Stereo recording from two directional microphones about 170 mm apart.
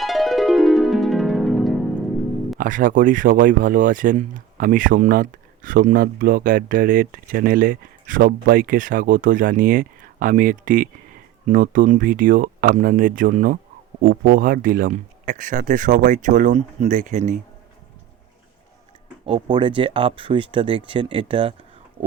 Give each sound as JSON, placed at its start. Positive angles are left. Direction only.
{"t": 0.0, "sound": "music", "side_deg": 0}
{"t": 2.6, "sound": "speech", "side_deg": -50}
{"t": 19.2, "sound": "speech", "side_deg": -30}